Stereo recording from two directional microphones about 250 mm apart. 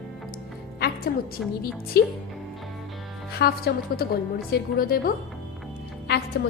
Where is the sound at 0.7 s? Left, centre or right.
Left.